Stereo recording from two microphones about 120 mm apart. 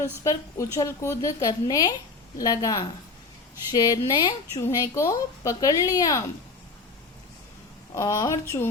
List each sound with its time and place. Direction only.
0.3 s speech: 25° left (ahead or behind)
7.9 s speech: 25° left (ahead or behind)